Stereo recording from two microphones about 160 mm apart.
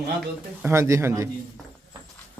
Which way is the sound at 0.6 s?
15° right (ahead or behind).